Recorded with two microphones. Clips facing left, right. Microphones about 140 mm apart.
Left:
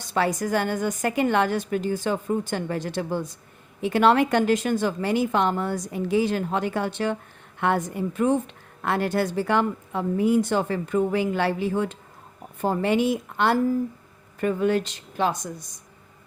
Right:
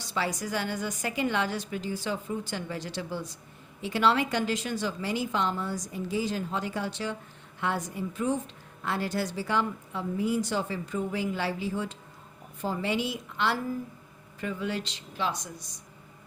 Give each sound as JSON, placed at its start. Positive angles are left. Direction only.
{"t": 0.0, "sound": "a woman's voice", "side_deg": 50}